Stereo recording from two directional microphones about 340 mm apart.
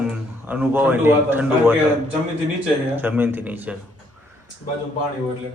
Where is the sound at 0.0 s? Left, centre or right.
Centre.